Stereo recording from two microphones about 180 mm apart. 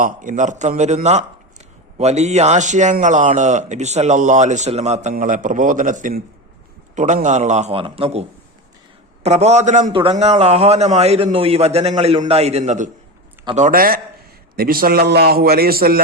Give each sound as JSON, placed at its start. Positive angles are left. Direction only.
{"t": 0.0, "sound": "a man's voice", "side_deg": -45}
{"t": 5.1, "sound": "a man's voice", "side_deg": -45}
{"t": 13.6, "sound": "a man's voice", "side_deg": -50}